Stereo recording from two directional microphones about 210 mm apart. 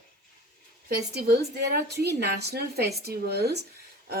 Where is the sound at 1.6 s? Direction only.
50° right (ahead or behind).